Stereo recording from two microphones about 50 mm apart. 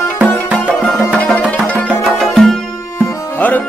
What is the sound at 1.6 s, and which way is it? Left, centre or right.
Music, centre.